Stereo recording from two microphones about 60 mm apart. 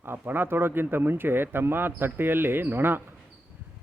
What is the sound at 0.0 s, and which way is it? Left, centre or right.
Speech, right.